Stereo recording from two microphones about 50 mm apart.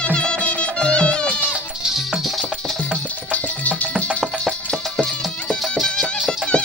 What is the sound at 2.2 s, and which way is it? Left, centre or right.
Music, centre.